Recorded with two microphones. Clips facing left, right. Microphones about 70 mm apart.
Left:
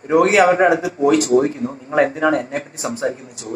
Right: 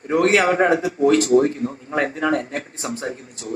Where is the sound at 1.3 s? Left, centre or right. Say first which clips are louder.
Left 1 dB; left.